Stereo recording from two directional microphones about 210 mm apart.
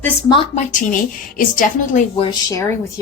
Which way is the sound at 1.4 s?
40° left (ahead or behind).